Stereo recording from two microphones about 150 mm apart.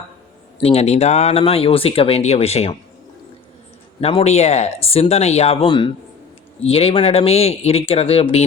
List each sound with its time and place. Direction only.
0.6 s speech: 45° left (ahead or behind)
4.0 s speech: 45° left (ahead or behind)